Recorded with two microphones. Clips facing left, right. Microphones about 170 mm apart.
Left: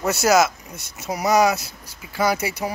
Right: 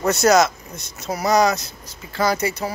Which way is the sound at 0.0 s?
5° left (ahead or behind).